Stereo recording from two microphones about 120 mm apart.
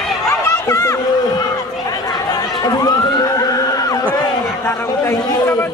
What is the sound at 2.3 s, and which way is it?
Chatter, 35° left (ahead or behind).